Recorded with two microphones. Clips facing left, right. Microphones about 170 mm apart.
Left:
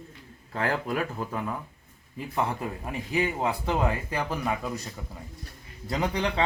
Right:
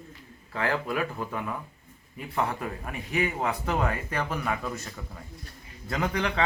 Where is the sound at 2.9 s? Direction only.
25° left (ahead or behind).